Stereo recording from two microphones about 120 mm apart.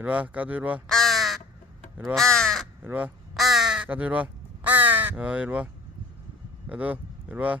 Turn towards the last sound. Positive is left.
turn(degrees=-10)  # may be behind; listen again after turning